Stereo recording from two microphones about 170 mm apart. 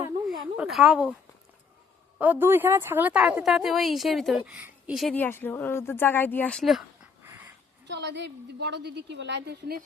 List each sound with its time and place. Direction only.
0.5 s speech: 5° right (ahead or behind)
2.1 s speech: 10° right (ahead or behind)
5.1 s speech: 10° left (ahead or behind)
7.9 s a woman's voice: 90° right; by 9.8 s 70° right (ahead or behind)